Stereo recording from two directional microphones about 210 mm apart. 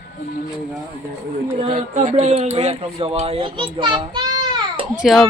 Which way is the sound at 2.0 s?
35° right (ahead or behind).